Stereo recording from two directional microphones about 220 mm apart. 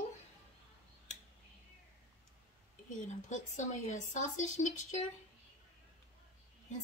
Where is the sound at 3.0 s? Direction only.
35° left (ahead or behind).